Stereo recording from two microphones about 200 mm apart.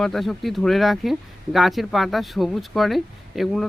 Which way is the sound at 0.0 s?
Centre (ahead or behind).